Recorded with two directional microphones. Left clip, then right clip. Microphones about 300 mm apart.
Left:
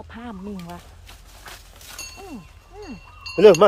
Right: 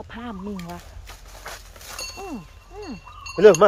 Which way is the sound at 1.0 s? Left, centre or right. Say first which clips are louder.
Right 3 dB; centre.